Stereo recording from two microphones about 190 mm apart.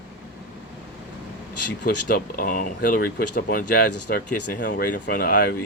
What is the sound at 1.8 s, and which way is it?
Speech, 50° left (ahead or behind).